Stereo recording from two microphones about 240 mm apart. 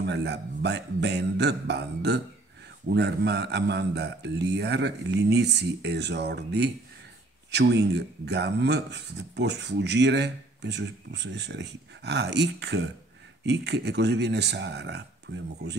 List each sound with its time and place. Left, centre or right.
0.0 s speech: right